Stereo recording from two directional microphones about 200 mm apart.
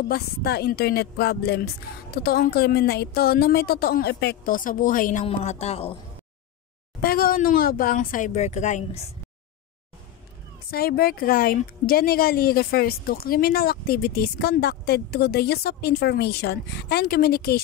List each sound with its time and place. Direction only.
0.1 s speech: 55° left (ahead or behind); by 5.9 s 30° left (ahead or behind)
7.0 s speech: 50° left (ahead or behind)
10.7 s speech: 50° left (ahead or behind)